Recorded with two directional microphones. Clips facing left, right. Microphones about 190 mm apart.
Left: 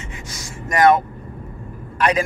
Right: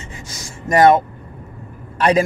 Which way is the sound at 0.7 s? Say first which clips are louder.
Right 3 dB; 30° right (ahead or behind).